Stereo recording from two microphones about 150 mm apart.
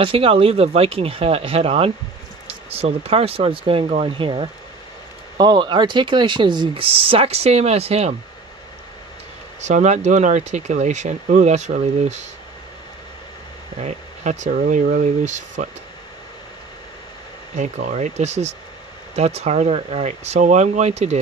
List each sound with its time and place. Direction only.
0.0 s speech: 40° right (ahead or behind)
9.6 s speech: 50° right (ahead or behind)
13.7 s speech: 50° right (ahead or behind)
17.6 s speech: 55° right (ahead or behind)